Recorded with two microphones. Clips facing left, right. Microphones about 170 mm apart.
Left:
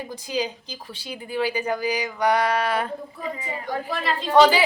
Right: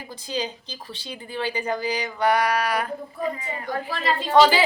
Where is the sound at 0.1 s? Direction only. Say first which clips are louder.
Even; 10° left (ahead or behind).